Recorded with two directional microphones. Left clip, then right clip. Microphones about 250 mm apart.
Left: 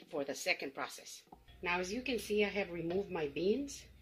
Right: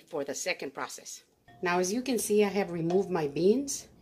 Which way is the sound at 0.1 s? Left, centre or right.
Right.